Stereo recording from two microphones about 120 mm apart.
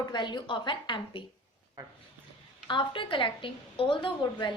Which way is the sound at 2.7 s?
45° left (ahead or behind).